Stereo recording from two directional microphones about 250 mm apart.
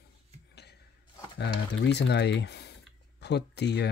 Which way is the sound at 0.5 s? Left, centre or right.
Left.